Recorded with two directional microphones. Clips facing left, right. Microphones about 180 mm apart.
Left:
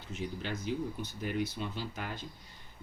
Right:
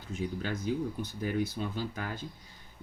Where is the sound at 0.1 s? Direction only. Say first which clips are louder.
Right 3 dB; 50° right (ahead or behind).